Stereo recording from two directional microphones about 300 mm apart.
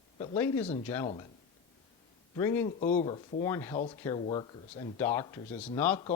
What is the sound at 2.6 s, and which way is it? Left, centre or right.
Speech, left.